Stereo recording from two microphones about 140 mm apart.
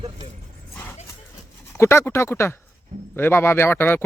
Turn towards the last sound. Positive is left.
turn(degrees=15)  # may be behind; listen again after turning